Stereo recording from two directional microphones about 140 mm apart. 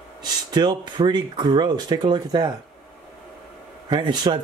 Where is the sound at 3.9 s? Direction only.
35° right (ahead or behind).